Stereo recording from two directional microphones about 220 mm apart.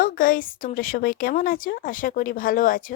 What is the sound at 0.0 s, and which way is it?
Speech, 40° left (ahead or behind).